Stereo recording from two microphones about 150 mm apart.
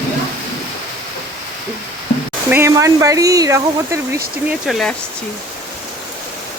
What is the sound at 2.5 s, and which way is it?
Speech, 20° right (ahead or behind).